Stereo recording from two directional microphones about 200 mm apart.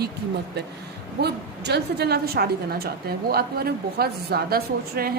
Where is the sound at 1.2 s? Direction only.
55° right (ahead or behind).